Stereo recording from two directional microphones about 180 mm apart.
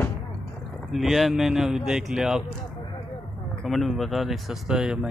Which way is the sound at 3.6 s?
Centre (ahead or behind).